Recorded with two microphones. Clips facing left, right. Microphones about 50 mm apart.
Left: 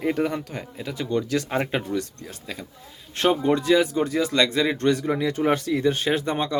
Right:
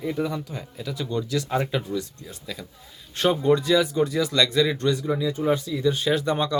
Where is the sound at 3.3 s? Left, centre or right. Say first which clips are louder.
Right 1 dB; left.